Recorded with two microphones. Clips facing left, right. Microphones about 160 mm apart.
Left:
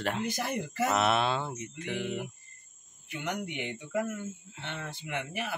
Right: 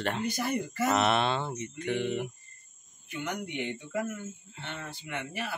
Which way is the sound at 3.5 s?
10° left (ahead or behind).